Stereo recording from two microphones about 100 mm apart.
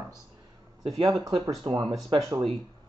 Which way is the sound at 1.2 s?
50° right (ahead or behind).